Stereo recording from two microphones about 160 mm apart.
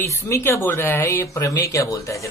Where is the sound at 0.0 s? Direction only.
15° left (ahead or behind).